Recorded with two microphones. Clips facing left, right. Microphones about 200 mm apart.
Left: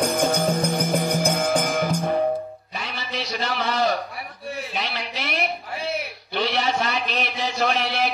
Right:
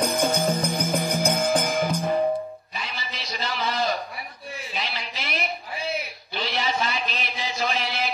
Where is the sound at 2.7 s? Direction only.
70° left (ahead or behind).